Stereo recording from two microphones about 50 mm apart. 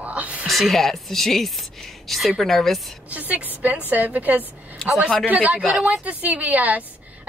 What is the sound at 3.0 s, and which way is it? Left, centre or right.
A woman's voice, right.